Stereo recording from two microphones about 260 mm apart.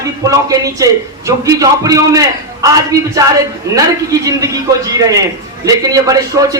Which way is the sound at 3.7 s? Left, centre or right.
Centre.